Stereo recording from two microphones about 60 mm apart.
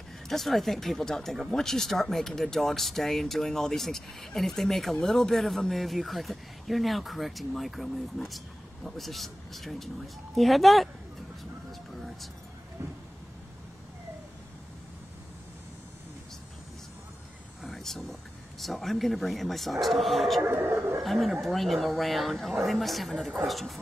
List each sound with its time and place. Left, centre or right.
0.3 s speech: centre
17.6 s a sound: centre
18.6 s speech: centre
20.4 s speech: right
21.0 s speech: centre